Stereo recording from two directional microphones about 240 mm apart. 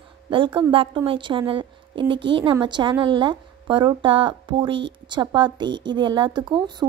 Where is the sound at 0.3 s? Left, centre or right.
Right.